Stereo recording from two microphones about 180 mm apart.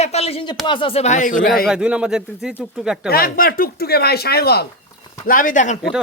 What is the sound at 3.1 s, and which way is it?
Speech, 55° left (ahead or behind).